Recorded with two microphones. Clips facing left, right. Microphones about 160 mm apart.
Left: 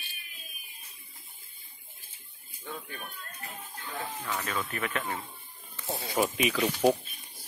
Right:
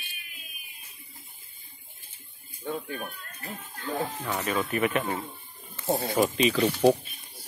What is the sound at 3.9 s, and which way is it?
Speech, 35° right (ahead or behind).